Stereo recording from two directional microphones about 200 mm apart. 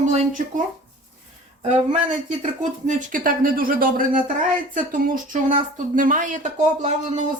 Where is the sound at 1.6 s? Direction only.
35° right (ahead or behind).